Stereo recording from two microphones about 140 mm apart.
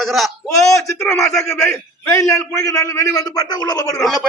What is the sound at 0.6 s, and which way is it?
A man's voice, 20° left (ahead or behind).